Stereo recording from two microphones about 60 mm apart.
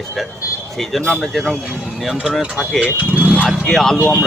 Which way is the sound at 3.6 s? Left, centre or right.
Centre.